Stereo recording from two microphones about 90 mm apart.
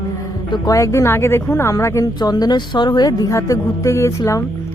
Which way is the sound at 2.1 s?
45° left (ahead or behind).